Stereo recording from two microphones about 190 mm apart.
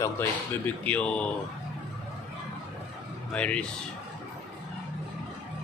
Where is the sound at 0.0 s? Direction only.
10° left (ahead or behind).